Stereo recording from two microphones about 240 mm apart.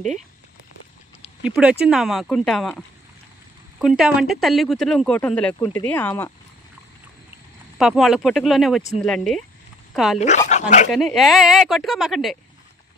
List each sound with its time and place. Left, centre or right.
1.4 s speech: centre
3.8 s speech: centre
7.7 s speech: centre
10.1 s speech: left
10.9 s speech: centre